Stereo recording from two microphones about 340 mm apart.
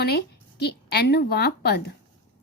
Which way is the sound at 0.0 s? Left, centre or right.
Left.